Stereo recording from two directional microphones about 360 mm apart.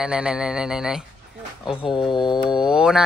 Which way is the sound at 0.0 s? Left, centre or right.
Centre.